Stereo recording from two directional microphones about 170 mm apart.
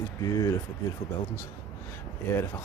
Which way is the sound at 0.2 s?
20° left (ahead or behind).